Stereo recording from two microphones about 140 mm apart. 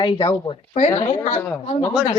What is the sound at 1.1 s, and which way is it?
Speech, 55° left (ahead or behind).